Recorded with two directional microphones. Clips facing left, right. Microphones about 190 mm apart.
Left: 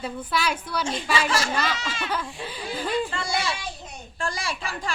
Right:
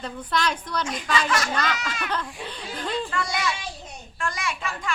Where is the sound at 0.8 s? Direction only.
30° left (ahead or behind).